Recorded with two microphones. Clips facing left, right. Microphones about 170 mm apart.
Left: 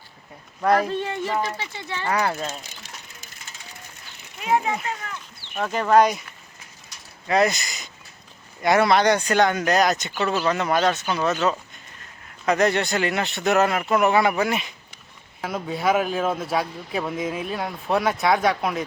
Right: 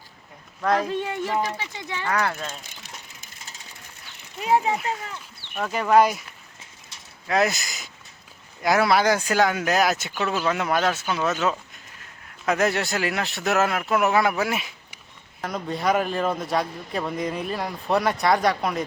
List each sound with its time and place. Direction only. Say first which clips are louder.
0.6 s speech: left 3 dB; 5° left (ahead or behind)
0.9 s speech: even; 10° right (ahead or behind)
2.0 s speech: left 2 dB; 15° left (ahead or behind)
4.4 s speech: right 1 dB; 35° right (ahead or behind)
5.5 s a man's voice: left 1 dB; 5° right (ahead or behind)
7.3 s a man's voice: left 2 dB; centre (ahead or behind)